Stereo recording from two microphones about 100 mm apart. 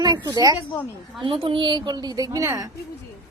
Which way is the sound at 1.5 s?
55° right (ahead or behind).